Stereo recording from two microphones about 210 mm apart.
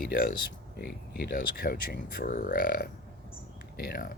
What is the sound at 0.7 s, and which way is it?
Speech, 50° left (ahead or behind).